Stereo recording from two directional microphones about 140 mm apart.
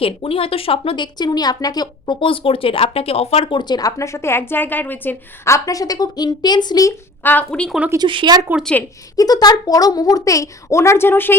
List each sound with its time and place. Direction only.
0.0 s speech: 40° left (ahead or behind)
7.2 s a woman's voice: 15° left (ahead or behind)
7.9 s speech: 35° right (ahead or behind)
9.1 s speech: 25° left (ahead or behind)